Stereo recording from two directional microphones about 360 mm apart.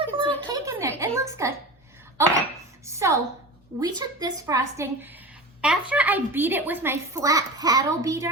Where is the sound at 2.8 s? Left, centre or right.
Centre.